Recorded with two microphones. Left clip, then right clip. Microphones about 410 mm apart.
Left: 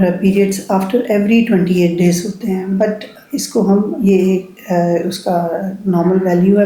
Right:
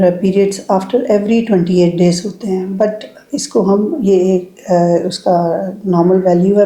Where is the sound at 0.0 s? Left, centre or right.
Right.